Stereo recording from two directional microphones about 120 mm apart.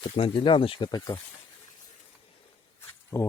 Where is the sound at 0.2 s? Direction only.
45° left (ahead or behind).